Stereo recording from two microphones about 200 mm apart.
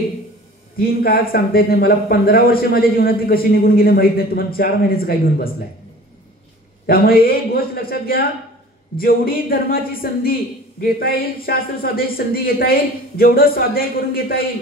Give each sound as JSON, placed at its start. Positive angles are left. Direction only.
{"t": 0.7, "sound": "speech", "side_deg": 50}
{"t": 6.9, "sound": "speech", "side_deg": 50}